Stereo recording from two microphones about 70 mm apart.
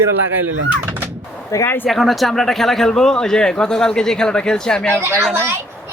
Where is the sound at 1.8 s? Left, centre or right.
Centre.